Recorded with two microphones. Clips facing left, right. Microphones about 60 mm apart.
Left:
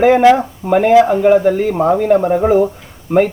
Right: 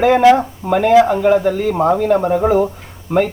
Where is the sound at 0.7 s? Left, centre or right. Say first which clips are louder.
Left 2 dB; centre.